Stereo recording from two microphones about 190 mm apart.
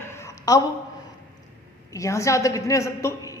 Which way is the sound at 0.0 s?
20° left (ahead or behind).